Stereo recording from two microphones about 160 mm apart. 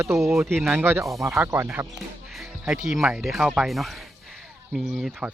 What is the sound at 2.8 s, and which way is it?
Speech, 5° right (ahead or behind).